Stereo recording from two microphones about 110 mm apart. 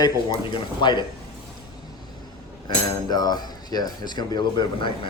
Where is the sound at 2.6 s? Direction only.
40° left (ahead or behind).